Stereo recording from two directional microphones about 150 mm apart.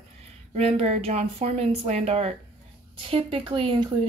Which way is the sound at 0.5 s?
45° right (ahead or behind).